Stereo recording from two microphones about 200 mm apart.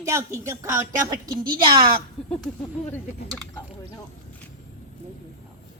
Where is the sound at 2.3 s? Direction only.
5° left (ahead or behind).